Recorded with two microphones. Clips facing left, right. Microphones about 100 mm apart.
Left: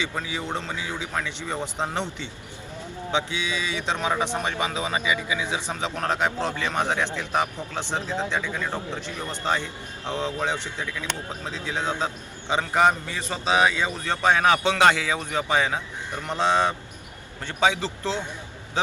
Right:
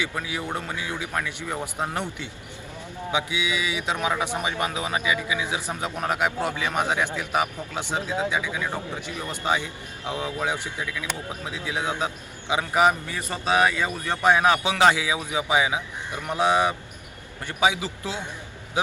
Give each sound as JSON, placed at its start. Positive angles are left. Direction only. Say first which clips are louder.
{"t": 0.1, "sound": "speech", "louder": "even", "side_deg": -10}
{"t": 13.3, "sound": "speech", "louder": "even", "side_deg": 20}
{"t": 14.0, "sound": "speech", "louder": "right 1 dB", "side_deg": -15}